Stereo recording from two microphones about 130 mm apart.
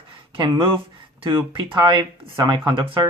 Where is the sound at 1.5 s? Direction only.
40° right (ahead or behind).